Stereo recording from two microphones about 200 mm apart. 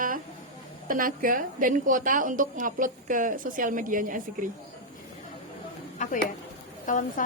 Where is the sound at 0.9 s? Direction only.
45° right (ahead or behind).